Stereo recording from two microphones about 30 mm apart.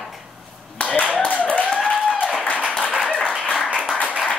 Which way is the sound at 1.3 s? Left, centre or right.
Left.